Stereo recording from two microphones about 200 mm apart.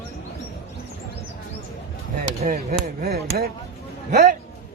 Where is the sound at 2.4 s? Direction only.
40° right (ahead or behind).